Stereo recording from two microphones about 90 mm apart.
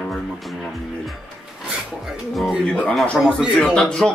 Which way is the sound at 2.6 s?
15° left (ahead or behind).